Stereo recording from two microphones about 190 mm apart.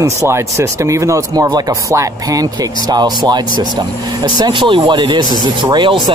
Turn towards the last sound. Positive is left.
turn(degrees=-25)  # may be behind; listen again after turning